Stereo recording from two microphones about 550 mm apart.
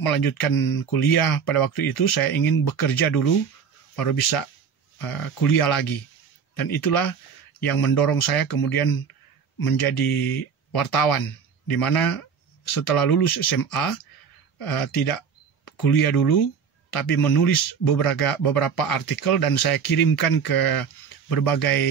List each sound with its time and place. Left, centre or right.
0.0 s speech: left